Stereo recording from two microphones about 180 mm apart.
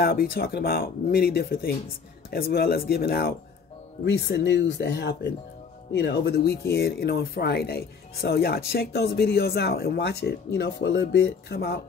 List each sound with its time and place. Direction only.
0.0 s speech: 60° left (ahead or behind)